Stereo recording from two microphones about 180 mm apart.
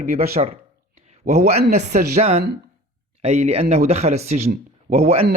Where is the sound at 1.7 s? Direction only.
40° right (ahead or behind).